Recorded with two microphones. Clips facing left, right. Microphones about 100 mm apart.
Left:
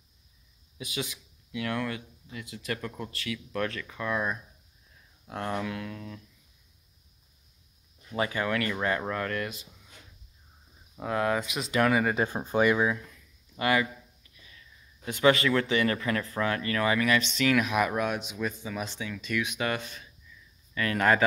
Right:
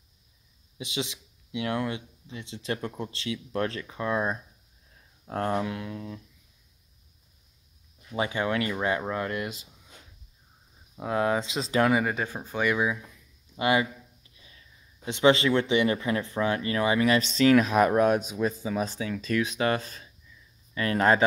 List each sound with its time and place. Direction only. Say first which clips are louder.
0.7 s speech: right 2 dB; 25° right (ahead or behind)
8.2 s speech: right 1 dB; 25° right (ahead or behind)
11.0 s speech: right 2 dB; 15° right (ahead or behind)
12.4 s speech: left 5 dB; 20° left (ahead or behind)
12.6 s speech: even; 5° right (ahead or behind)
13.6 s speech: right 2 dB; 20° right (ahead or behind)